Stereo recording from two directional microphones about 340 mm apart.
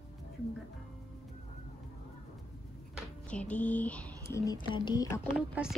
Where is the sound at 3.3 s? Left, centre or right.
Centre.